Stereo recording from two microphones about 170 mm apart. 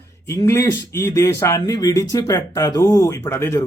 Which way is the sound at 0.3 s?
15° left (ahead or behind).